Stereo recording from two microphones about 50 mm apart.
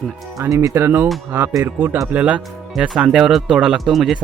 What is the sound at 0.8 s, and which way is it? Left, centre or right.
Speech, right.